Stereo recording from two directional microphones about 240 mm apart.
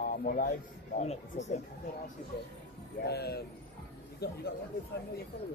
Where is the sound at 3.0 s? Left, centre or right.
Left.